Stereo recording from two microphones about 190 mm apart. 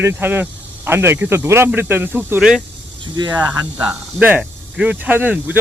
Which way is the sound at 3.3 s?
10° right (ahead or behind).